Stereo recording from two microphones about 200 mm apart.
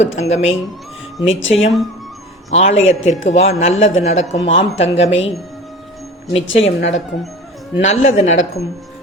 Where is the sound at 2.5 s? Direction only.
35° left (ahead or behind).